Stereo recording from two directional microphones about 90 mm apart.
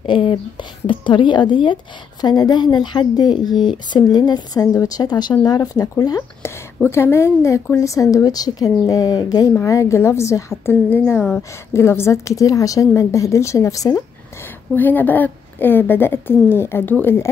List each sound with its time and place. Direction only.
0.0 s speech: 75° left (ahead or behind); by 1.8 s 60° left (ahead or behind)
2.2 s speech: 50° left (ahead or behind)
6.9 s a woman's voice: 30° left (ahead or behind); by 9.5 s 45° left (ahead or behind)
9.6 s a woman's voice: 35° left (ahead or behind)
14.7 s a woman's voice: 20° left (ahead or behind)